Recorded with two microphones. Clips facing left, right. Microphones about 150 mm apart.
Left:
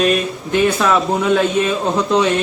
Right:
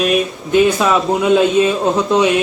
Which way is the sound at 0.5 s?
15° right (ahead or behind).